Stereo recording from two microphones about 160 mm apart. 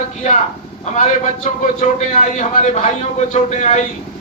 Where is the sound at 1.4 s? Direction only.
50° left (ahead or behind).